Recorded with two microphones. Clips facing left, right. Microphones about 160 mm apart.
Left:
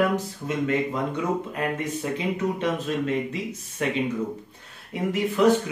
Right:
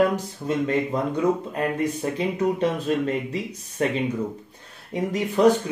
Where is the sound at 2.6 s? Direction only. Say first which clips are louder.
Right 3 dB; 35° right (ahead or behind).